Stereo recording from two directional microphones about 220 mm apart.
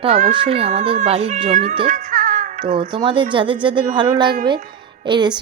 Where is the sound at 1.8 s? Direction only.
35° right (ahead or behind).